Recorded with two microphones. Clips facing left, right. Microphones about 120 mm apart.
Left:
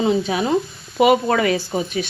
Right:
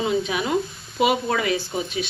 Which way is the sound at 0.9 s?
55° left (ahead or behind).